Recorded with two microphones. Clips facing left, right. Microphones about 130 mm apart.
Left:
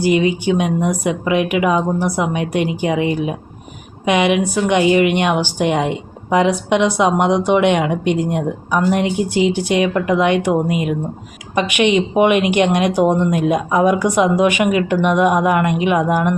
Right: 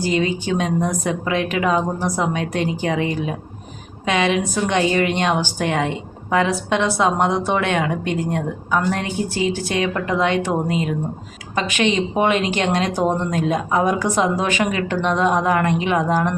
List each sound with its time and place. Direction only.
0.0 s a woman's voice: 15° left (ahead or behind)